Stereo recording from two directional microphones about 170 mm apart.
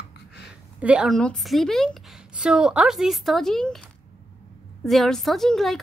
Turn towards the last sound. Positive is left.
turn(degrees=0)  # may be behind; listen again after turning